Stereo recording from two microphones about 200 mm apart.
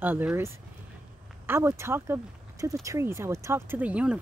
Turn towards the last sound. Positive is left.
turn(degrees=-5)  # may be behind; listen again after turning